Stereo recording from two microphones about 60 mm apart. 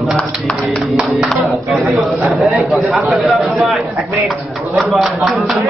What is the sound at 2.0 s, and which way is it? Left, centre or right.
Mantra, centre.